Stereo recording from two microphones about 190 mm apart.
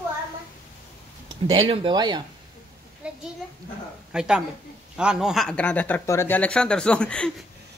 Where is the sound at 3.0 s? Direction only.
5° right (ahead or behind).